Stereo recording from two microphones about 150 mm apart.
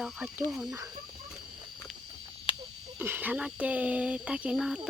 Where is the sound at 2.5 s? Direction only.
35° left (ahead or behind).